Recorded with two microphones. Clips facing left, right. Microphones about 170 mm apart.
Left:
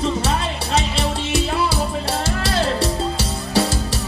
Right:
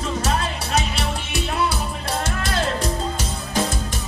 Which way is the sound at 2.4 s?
30° left (ahead or behind).